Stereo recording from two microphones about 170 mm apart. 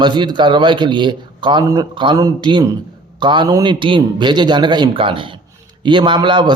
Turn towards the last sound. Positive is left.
turn(degrees=-25)  # may be behind; listen again after turning